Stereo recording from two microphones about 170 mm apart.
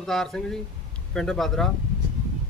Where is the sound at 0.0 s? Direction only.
Centre (ahead or behind).